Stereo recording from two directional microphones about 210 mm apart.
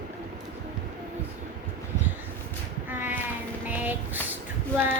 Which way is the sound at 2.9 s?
10° right (ahead or behind).